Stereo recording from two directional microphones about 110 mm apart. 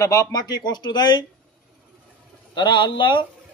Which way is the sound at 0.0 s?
30° left (ahead or behind).